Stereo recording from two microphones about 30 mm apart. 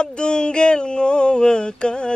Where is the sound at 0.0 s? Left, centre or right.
Left.